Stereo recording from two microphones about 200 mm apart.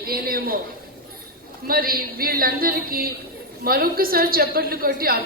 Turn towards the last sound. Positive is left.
turn(degrees=-45)  # may be behind; listen again after turning